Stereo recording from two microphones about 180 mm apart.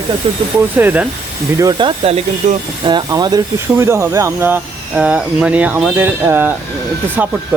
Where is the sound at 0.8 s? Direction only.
10° right (ahead or behind).